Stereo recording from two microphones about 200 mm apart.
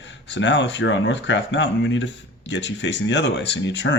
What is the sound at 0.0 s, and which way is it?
Speech, 65° left (ahead or behind).